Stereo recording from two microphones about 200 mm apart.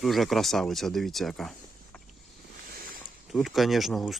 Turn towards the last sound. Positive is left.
turn(degrees=0)  # may be behind; listen again after turning